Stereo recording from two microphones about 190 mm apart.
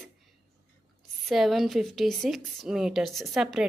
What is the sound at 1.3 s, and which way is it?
Speech, centre (ahead or behind).